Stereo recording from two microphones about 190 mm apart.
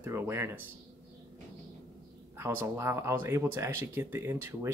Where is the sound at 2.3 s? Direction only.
15° right (ahead or behind).